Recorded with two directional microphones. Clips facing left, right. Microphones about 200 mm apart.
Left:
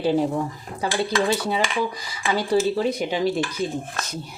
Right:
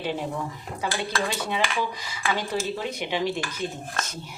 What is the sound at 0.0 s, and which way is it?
Speech, 40° left (ahead or behind).